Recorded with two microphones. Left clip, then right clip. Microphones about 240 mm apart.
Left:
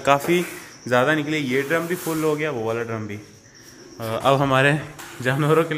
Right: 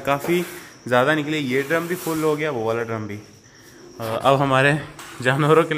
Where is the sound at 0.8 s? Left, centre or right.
Centre.